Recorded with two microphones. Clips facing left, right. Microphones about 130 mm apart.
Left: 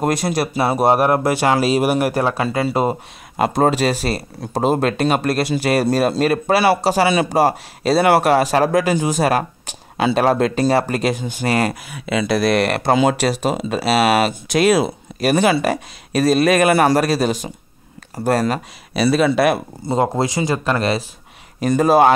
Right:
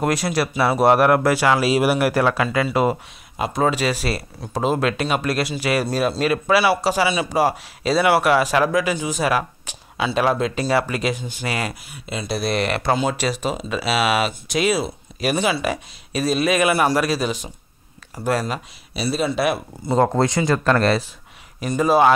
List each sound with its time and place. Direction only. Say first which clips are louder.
0.4 s speech: left 1 dB; 45° left (ahead or behind)
0.8 s speech: right 1 dB; 30° left (ahead or behind)
1.8 s speech: left 1 dB; 45° left (ahead or behind)
2.1 s speech: even; 30° left (ahead or behind); by 7.9 s 55° left (ahead or behind)
7.9 s speech: left 3 dB; 40° left (ahead or behind)
8.6 s speech: left 4 dB; 50° left (ahead or behind)
11.7 s speech: left 9 dB; 90° left; by 12.9 s 50° left (ahead or behind)
12.9 s speech: left 8 dB; 65° left (ahead or behind)
13.7 s speech: left 4 dB; 55° left (ahead or behind)
18.1 s speech: left 5 dB; 55° left (ahead or behind)
18.9 s speech: left 6 dB; 75° left (ahead or behind); by 19.6 s 55° left (ahead or behind)
20.2 s speech: even; 10° left (ahead or behind)
21.5 s speech: left 4 dB; 50° left (ahead or behind)